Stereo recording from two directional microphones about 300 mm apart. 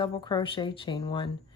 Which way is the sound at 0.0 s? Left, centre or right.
Centre.